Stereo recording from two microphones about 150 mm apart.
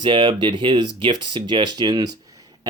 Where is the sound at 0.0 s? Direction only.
35° right (ahead or behind).